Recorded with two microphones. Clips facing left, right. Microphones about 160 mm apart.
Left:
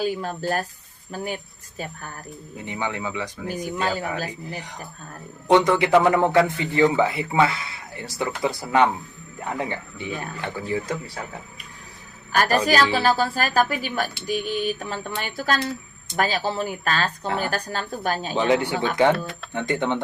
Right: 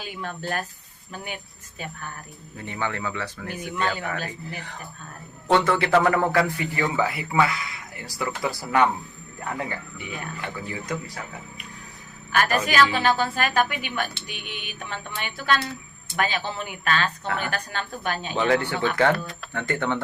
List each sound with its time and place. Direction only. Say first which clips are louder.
0.0 s a woman's voice: left 8 dB; 35° left (ahead or behind)
2.6 s speech: left 1 dB; 15° left (ahead or behind)
3.5 s a woman's voice: left 2 dB; 35° left (ahead or behind)
4.3 s a man's voice: left 2 dB; 15° left (ahead or behind)
12.3 s a woman's voice: left 3 dB; 35° left (ahead or behind)
18.3 s a man's voice: left 1 dB; 15° left (ahead or behind)